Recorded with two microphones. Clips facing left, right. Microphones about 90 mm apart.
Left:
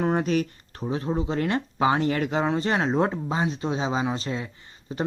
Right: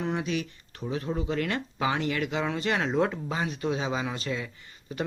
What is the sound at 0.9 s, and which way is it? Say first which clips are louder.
Speech: left 3 dB; 30° left (ahead or behind).